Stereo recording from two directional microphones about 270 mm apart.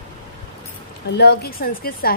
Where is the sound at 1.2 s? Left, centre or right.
Left.